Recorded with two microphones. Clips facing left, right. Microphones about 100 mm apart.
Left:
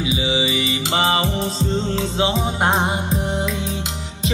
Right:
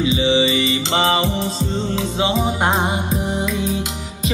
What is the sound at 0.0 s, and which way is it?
Music, 10° left (ahead or behind).